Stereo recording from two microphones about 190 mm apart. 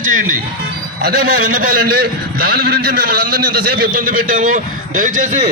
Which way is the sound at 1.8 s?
55° right (ahead or behind).